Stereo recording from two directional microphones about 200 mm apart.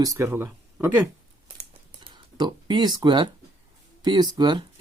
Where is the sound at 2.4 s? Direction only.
20° right (ahead or behind).